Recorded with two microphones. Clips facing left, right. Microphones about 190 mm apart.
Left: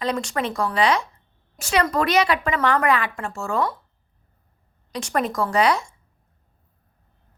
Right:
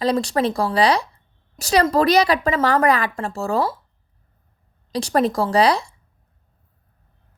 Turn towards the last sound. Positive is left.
turn(degrees=-35)  # may be behind; listen again after turning